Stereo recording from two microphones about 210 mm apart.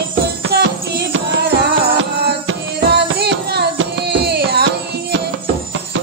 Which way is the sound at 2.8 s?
50° right (ahead or behind).